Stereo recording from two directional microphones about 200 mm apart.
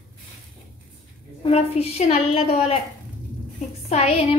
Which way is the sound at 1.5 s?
30° left (ahead or behind).